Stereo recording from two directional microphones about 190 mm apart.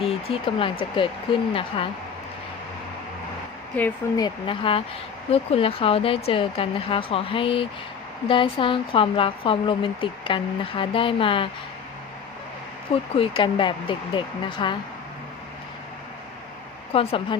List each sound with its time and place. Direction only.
0.0 s speech: 30° left (ahead or behind)
3.7 s speech: 10° left (ahead or behind)
4.2 s speech: 25° left (ahead or behind)
12.9 s speech: 30° left (ahead or behind)
16.9 s speech: 30° left (ahead or behind)